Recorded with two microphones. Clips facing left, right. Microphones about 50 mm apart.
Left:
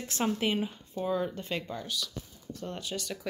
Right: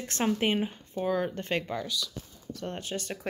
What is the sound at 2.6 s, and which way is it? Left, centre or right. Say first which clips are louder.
Speech: right 2 dB; right.